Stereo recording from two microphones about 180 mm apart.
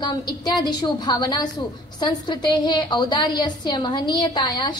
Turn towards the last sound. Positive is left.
turn(degrees=20)  # may be behind; listen again after turning